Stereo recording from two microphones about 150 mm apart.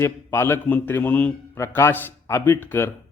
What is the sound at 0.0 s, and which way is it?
A man's voice, 15° left (ahead or behind).